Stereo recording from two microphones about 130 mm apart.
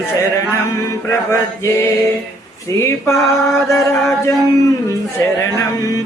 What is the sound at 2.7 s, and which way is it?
Mantra, 20° left (ahead or behind).